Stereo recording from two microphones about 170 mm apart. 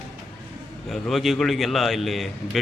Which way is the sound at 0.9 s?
Centre (ahead or behind).